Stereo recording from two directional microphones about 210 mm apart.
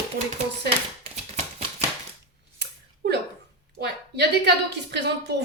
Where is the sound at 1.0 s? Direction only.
30° right (ahead or behind).